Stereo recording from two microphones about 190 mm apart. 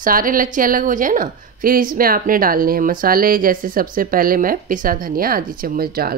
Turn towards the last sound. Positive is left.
turn(degrees=-50)  # may be behind; listen again after turning